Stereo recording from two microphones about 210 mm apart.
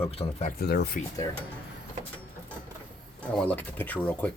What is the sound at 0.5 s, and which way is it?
Speech, 50° left (ahead or behind).